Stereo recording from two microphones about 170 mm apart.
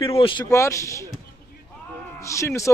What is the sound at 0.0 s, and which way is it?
Speech, 30° left (ahead or behind).